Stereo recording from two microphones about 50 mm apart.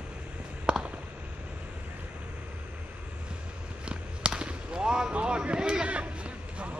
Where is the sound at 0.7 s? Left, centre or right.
Right.